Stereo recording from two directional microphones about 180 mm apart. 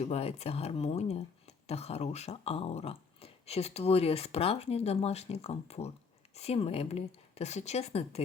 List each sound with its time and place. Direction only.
0.0 s speech: 35° left (ahead or behind)